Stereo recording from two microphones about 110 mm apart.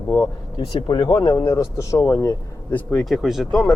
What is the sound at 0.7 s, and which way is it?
Speech, 45° left (ahead or behind).